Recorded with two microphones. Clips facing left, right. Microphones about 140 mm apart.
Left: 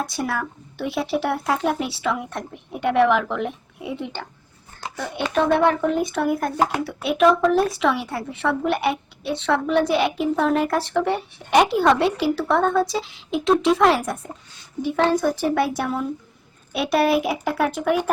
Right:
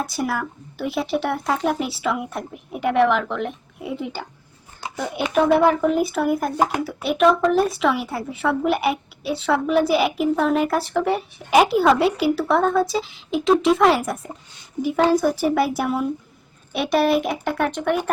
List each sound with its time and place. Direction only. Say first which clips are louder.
0.0 s a woman's voice: right 1 dB; centre (ahead or behind)
4.8 s a sound: right 2 dB; 15° right (ahead or behind)
5.1 s a woman's voice: right 2 dB; 5° right (ahead or behind)